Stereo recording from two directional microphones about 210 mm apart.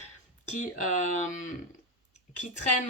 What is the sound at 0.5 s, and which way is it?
Speech, 35° left (ahead or behind).